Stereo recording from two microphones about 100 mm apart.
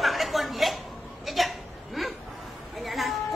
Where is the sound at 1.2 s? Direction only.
Centre (ahead or behind).